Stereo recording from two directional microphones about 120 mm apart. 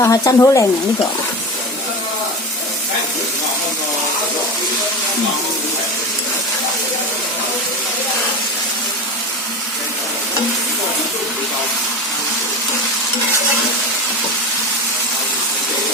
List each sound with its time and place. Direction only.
0.0 s speech: 25° left (ahead or behind)